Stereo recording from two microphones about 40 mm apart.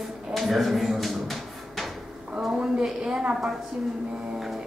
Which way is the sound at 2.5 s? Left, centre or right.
Right.